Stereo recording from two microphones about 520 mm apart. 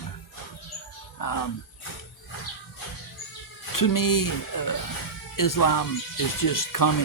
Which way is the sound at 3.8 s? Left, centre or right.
Left.